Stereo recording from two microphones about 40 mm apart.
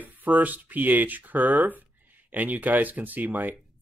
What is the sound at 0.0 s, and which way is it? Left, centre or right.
Speech, right.